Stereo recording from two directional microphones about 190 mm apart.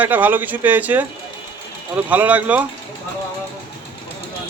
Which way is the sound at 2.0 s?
10° right (ahead or behind).